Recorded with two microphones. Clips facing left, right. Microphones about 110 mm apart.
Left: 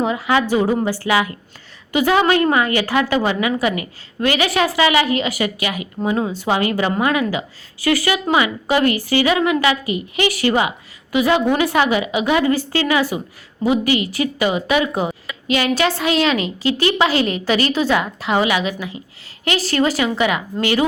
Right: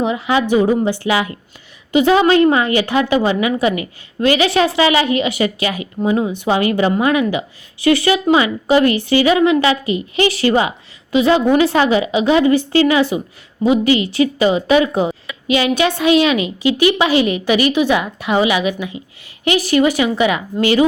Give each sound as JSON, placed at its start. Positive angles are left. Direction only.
{"t": 0.0, "sound": "a woman's voice", "side_deg": -20}
{"t": 4.2, "sound": "a woman's voice", "side_deg": -25}